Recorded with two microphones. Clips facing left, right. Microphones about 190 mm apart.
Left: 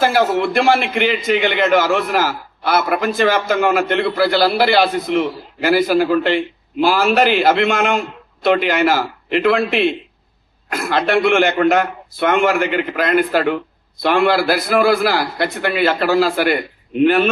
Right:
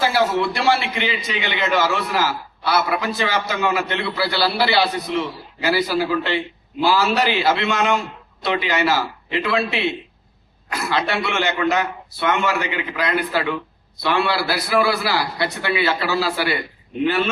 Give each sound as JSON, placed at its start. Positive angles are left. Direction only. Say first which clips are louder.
{"t": 0.0, "sound": "a man's voice", "louder": "left 4 dB", "side_deg": 50}